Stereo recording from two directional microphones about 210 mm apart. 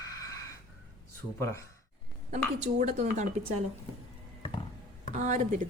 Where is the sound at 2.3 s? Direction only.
35° right (ahead or behind).